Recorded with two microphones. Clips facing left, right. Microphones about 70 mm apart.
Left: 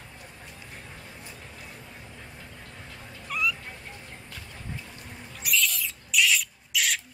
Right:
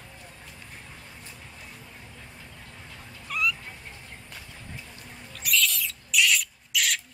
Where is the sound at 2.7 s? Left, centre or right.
Centre.